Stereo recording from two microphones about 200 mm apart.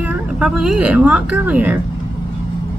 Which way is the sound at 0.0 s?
5° right (ahead or behind).